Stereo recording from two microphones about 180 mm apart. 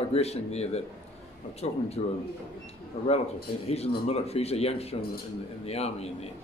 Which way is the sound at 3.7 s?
35° left (ahead or behind).